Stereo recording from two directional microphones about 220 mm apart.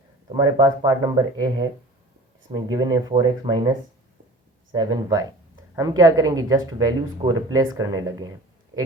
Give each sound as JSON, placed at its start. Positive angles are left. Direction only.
{"t": 0.3, "sound": "speech", "side_deg": -20}